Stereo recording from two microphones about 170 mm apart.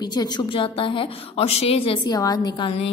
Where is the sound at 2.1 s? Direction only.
20° left (ahead or behind).